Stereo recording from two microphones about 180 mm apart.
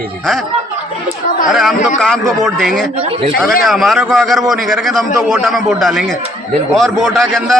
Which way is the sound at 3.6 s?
Centre (ahead or behind).